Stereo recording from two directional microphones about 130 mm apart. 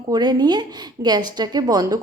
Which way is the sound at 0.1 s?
30° right (ahead or behind).